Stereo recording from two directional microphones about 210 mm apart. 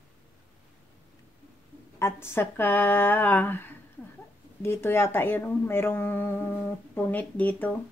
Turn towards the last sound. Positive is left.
turn(degrees=10)  # may be behind; listen again after turning